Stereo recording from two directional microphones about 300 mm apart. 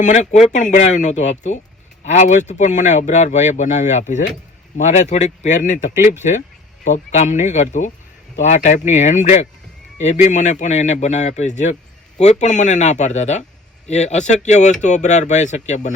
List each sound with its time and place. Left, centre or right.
0.0 s speech: left